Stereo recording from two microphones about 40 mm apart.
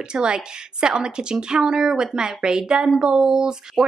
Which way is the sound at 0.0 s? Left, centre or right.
Right.